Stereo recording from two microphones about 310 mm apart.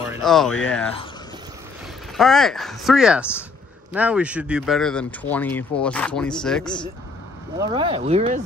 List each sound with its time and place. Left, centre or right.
0.0 s speech: centre
2.1 s speech: centre
7.5 s speech: centre